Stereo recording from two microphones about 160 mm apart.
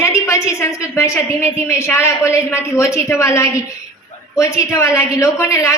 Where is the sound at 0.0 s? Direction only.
20° left (ahead or behind).